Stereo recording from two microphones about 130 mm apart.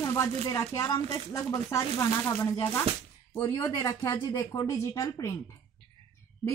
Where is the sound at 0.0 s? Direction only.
20° left (ahead or behind).